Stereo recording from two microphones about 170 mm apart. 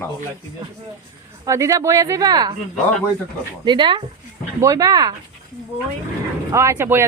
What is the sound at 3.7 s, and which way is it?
Speech, 30° right (ahead or behind).